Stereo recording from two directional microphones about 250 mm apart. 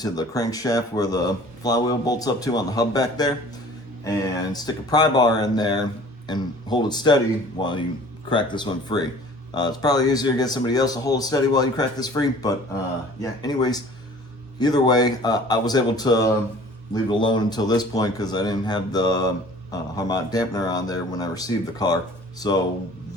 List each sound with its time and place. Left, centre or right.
0.0 s speech: centre